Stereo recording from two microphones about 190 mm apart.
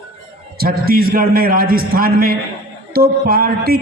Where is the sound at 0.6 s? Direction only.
50° right (ahead or behind).